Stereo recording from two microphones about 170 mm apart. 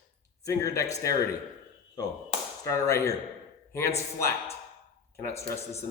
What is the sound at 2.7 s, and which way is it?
Speech, 20° left (ahead or behind).